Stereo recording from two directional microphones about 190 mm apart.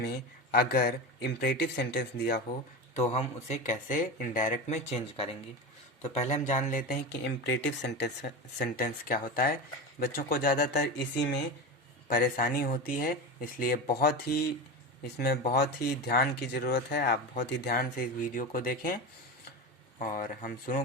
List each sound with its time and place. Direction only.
0.0 s speech: 50° left (ahead or behind)
2.9 s speech: 35° left (ahead or behind); by 11.3 s 65° left (ahead or behind)
12.0 s speech: 45° left (ahead or behind)
20.0 s speech: 45° left (ahead or behind)